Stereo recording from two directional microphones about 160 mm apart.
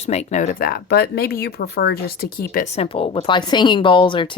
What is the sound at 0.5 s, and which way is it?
Speech, 70° left (ahead or behind).